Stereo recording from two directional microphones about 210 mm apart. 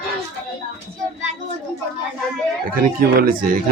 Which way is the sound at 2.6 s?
45° right (ahead or behind).